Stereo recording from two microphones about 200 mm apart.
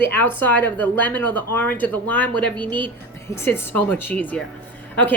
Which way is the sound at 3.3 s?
10° left (ahead or behind).